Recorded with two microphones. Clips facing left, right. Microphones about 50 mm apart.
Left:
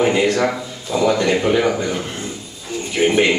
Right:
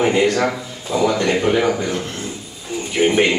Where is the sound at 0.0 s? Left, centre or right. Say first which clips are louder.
Even; centre.